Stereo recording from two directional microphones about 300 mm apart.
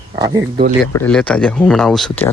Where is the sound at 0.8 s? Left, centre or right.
Centre.